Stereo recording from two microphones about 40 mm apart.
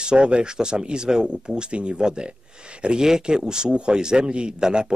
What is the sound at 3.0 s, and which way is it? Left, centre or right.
Speech, centre.